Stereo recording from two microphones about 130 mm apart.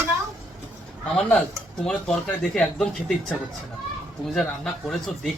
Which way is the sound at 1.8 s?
5° left (ahead or behind).